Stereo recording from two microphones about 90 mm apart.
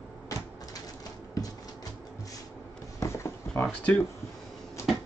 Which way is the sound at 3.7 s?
15° left (ahead or behind).